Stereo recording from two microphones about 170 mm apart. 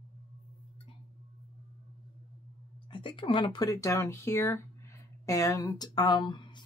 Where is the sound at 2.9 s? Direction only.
30° left (ahead or behind).